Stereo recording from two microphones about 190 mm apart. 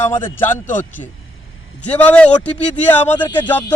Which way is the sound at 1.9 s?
5° left (ahead or behind).